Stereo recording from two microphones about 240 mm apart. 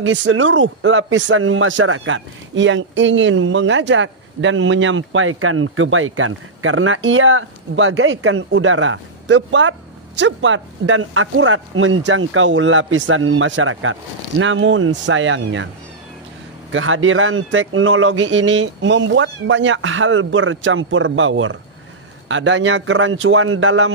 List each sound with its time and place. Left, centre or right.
0.0 s a man's voice: right
16.7 s a man's voice: right